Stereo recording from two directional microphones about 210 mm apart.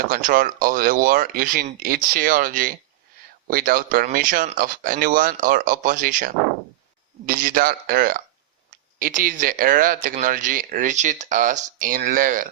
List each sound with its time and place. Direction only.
0.0 s speech: 40° right (ahead or behind)